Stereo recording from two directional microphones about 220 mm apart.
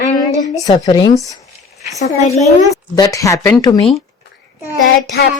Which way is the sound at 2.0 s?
30° left (ahead or behind).